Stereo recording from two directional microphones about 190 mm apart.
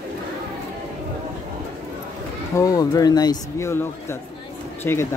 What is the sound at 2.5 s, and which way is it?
Speech, 20° left (ahead or behind).